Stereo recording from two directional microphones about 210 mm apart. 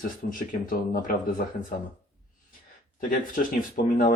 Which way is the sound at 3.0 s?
40° left (ahead or behind).